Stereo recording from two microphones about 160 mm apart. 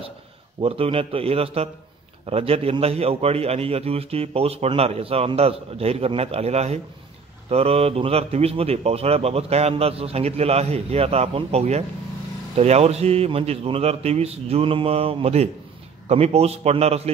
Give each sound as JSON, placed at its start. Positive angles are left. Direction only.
{"t": 0.6, "sound": "a man's voice", "side_deg": -35}